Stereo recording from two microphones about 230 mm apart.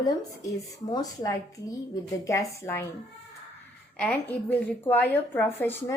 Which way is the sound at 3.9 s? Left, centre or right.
Centre.